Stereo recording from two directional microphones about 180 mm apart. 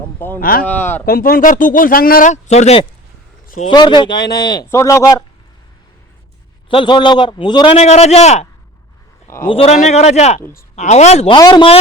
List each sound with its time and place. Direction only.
0.3 s speech: 55° left (ahead or behind)
0.6 s speech: 10° left (ahead or behind)
1.0 s speech: 55° left (ahead or behind); by 2.8 s 35° left (ahead or behind)
3.7 s a man's voice: 25° left (ahead or behind)
6.7 s a man's voice: 25° left (ahead or behind)
9.2 s a man's voice: 15° left (ahead or behind)
9.5 s a man's voice: 30° left (ahead or behind)
11.3 s a man's voice: 25° left (ahead or behind)